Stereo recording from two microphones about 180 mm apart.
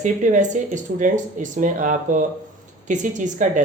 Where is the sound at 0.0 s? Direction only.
45° right (ahead or behind).